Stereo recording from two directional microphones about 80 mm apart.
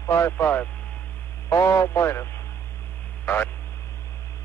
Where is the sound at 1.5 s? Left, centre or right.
Left.